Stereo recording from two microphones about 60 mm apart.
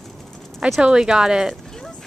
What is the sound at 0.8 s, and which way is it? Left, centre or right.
Speech, centre.